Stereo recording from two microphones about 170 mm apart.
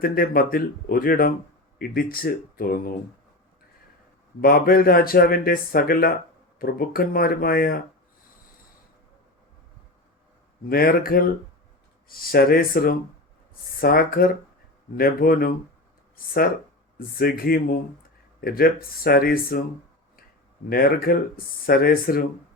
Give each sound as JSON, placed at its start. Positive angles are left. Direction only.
{"t": 0.0, "sound": "speech", "side_deg": 60}
{"t": 4.4, "sound": "speech", "side_deg": 60}
{"t": 10.7, "sound": "speech", "side_deg": 60}
{"t": 20.7, "sound": "speech", "side_deg": 60}